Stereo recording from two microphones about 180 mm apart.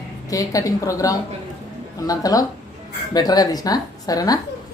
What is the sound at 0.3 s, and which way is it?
A woman's voice, 20° left (ahead or behind).